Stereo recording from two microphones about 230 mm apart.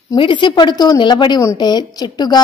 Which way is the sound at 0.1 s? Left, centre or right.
Left.